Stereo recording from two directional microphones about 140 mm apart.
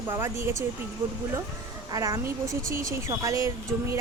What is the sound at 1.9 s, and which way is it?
Speech, 25° right (ahead or behind).